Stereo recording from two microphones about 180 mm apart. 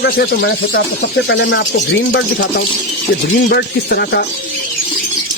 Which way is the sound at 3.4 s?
65° left (ahead or behind).